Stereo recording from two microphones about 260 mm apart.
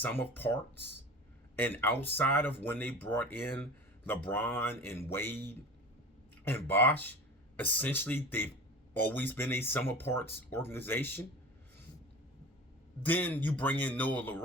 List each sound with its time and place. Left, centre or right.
0.0 s speech: centre
13.0 s speech: centre